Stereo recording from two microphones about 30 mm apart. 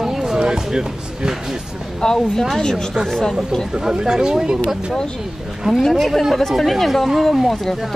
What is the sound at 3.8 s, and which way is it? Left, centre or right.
Speech, centre.